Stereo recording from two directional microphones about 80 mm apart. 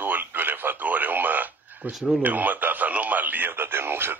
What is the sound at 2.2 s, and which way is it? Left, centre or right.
Speech, right.